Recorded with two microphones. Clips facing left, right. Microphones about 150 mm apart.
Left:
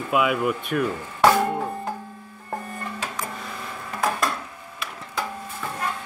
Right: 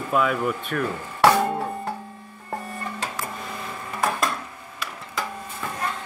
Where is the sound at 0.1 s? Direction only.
10° left (ahead or behind).